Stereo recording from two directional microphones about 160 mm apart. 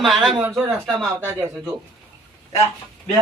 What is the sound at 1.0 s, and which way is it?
Speech, 15° right (ahead or behind).